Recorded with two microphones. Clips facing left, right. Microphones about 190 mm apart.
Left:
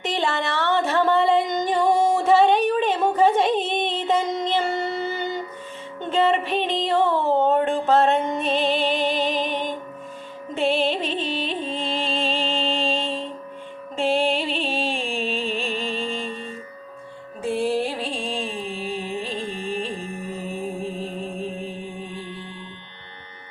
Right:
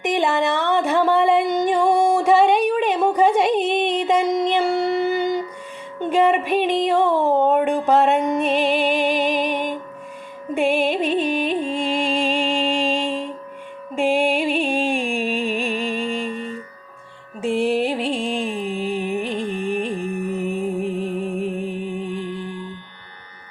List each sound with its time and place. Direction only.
0.0 s a sound: 15° right (ahead or behind)
10.5 s music: 15° right (ahead or behind)
17.4 s music: 25° right (ahead or behind)
20.5 s music: 65° right (ahead or behind)
22.1 s music: 25° left (ahead or behind)